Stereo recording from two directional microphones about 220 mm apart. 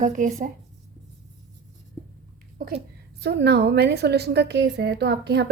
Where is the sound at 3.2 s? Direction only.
50° right (ahead or behind).